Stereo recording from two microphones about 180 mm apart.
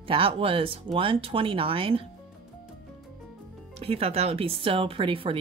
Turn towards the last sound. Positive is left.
turn(degrees=-30)  # may be behind; listen again after turning